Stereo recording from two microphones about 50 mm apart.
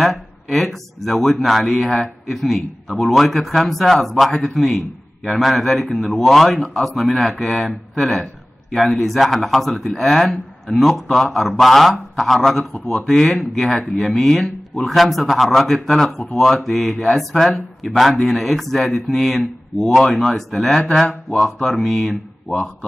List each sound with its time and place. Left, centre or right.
0.0 s a man's voice: centre
22.5 s a man's voice: centre